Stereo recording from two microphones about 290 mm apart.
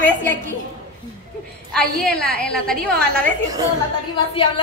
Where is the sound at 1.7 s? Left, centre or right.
Centre.